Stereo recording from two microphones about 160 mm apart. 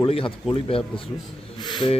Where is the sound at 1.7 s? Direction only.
30° left (ahead or behind).